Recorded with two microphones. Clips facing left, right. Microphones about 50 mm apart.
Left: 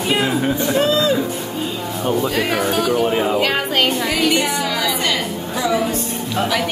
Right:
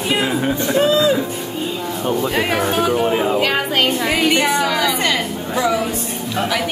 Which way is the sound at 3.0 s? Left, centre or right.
Centre.